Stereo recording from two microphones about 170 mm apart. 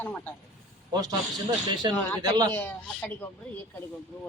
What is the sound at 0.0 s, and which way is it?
Speech, 10° left (ahead or behind).